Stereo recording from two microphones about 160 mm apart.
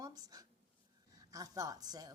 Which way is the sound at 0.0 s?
20° right (ahead or behind).